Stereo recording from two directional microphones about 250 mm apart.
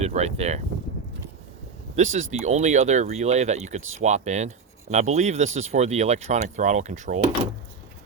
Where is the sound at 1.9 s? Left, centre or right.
Right.